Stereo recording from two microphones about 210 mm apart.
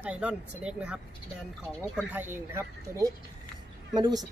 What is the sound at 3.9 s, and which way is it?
Speech, 20° right (ahead or behind).